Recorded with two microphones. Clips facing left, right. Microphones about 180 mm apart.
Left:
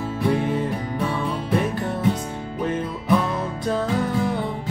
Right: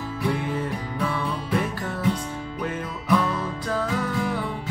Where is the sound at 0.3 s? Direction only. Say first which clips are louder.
Left 5 dB; 20° left (ahead or behind).